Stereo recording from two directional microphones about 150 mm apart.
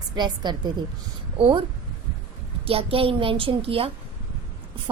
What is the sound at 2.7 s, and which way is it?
A woman's voice, 40° right (ahead or behind).